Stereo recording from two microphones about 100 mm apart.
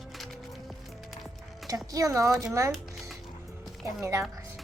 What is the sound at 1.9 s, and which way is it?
Speech, 30° right (ahead or behind).